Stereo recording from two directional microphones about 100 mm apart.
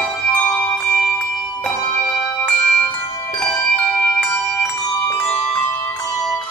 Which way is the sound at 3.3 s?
10° left (ahead or behind).